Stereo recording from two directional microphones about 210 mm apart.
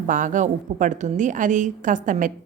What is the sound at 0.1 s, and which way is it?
A woman's voice, 40° right (ahead or behind).